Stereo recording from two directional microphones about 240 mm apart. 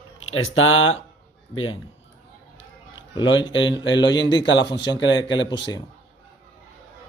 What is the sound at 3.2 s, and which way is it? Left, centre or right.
Speech, centre.